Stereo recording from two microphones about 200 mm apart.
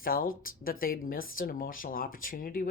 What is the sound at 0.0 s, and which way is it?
Speech, 45° left (ahead or behind).